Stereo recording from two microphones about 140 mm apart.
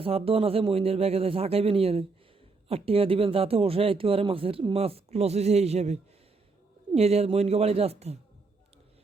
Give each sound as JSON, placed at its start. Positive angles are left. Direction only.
{"t": 0.0, "sound": "speech", "side_deg": -45}